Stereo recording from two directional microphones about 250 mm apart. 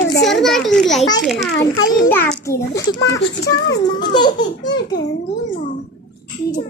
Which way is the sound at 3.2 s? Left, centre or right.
Left.